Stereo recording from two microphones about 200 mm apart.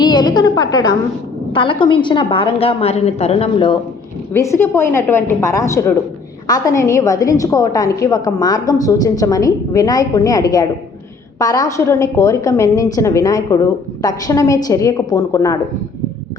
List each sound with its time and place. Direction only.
0.0 s a woman's voice: 20° left (ahead or behind)
4.4 s a woman's voice: 15° left (ahead or behind)